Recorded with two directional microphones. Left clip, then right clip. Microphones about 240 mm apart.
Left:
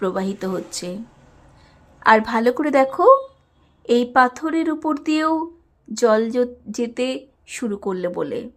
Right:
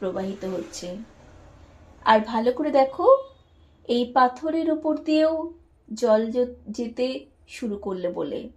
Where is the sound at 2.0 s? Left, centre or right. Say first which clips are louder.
Left 4 dB; left.